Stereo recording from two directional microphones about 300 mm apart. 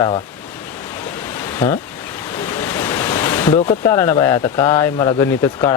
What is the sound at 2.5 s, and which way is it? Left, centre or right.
Speech, centre.